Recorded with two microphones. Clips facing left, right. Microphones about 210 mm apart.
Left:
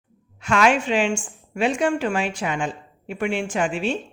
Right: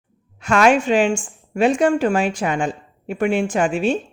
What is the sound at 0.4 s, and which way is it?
A man's voice, 45° right (ahead or behind).